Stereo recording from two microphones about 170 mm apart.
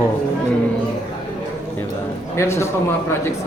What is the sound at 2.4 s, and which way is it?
Speech, 15° left (ahead or behind).